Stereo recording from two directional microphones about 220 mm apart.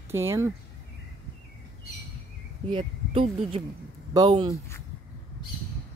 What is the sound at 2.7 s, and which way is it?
Speech, 25° right (ahead or behind).